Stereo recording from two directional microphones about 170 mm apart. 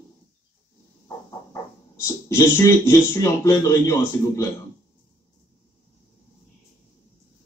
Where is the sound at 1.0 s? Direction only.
15° left (ahead or behind).